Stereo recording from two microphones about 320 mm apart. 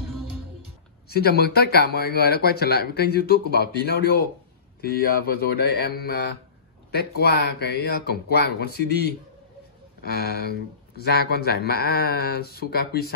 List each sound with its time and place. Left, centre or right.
1.0 s speech: left